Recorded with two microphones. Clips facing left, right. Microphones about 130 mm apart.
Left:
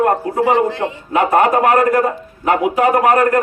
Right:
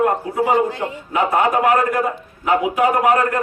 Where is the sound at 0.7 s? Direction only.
80° left; by 3.4 s 60° left (ahead or behind).